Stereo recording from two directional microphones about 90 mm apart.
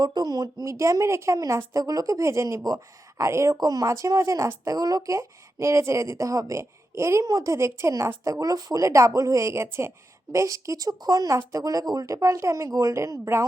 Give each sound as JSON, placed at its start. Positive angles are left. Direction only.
{"t": 0.0, "sound": "a woman's voice", "side_deg": -45}